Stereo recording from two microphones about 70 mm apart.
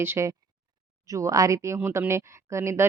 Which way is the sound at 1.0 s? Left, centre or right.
Right.